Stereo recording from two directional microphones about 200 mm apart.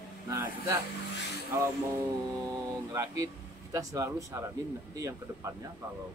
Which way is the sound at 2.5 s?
20° right (ahead or behind).